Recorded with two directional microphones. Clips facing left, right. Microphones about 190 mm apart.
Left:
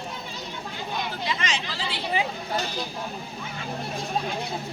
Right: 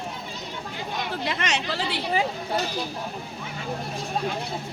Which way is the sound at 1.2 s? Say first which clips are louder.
Right 3 dB; 60° right (ahead or behind).